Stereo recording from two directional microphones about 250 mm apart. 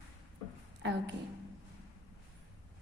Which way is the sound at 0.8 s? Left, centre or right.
Right.